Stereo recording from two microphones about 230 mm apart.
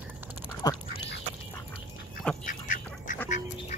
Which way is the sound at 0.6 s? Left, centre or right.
Centre.